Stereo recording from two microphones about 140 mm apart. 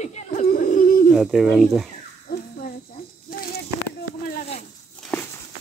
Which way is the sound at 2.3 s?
90° left.